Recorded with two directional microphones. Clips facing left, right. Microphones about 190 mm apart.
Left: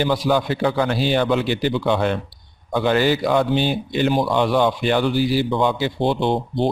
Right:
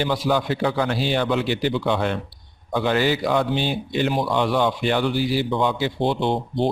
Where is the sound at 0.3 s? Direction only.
45° left (ahead or behind).